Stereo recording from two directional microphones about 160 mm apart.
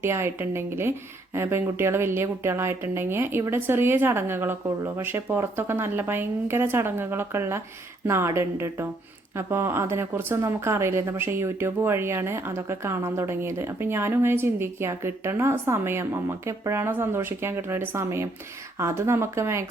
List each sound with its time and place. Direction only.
0.0 s a woman's voice: 15° right (ahead or behind)